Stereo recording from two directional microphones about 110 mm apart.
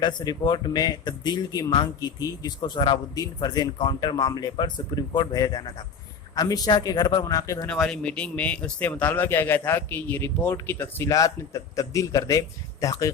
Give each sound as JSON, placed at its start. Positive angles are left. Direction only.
{"t": 0.0, "sound": "a man's voice", "side_deg": 40}
{"t": 7.8, "sound": "speech", "side_deg": 10}
{"t": 11.1, "sound": "a man's voice", "side_deg": 30}